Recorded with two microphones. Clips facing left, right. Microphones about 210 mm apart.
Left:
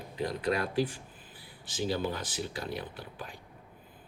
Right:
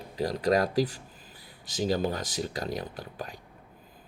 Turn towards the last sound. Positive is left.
turn(degrees=-40)  # may be behind; listen again after turning